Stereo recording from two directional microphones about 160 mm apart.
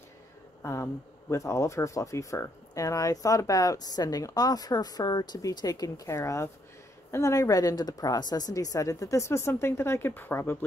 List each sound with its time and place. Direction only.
0.6 s speech: 15° left (ahead or behind)